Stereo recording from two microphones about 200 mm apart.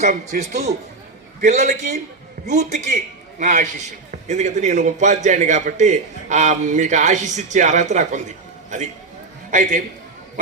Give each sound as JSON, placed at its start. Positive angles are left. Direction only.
{"t": 0.0, "sound": "a man's voice", "side_deg": -35}